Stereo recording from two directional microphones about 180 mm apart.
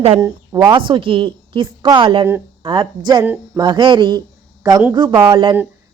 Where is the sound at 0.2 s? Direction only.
20° right (ahead or behind).